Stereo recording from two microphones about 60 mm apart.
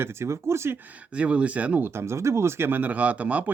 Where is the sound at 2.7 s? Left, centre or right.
Right.